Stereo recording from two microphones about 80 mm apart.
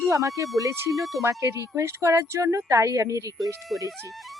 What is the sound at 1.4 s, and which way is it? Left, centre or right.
Speech, right.